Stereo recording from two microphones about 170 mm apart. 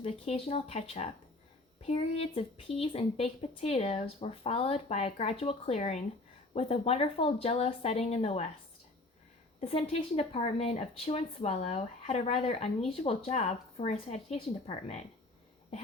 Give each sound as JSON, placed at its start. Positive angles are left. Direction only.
{"t": 0.0, "sound": "a woman's voice", "side_deg": 35}
{"t": 9.6, "sound": "a woman's voice", "side_deg": 35}